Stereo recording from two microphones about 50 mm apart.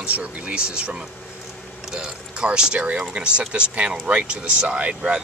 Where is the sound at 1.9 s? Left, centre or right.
Centre.